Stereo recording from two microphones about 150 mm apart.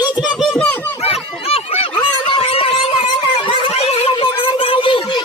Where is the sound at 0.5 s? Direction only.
15° left (ahead or behind).